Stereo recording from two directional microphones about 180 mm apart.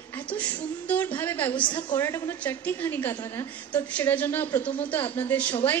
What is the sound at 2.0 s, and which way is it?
A woman's voice, 15° left (ahead or behind).